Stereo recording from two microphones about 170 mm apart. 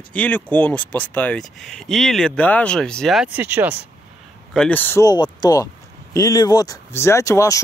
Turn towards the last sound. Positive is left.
turn(degrees=20)  # may be behind; listen again after turning